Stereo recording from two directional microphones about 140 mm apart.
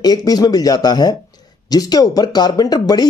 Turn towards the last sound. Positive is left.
turn(degrees=30)  # may be behind; listen again after turning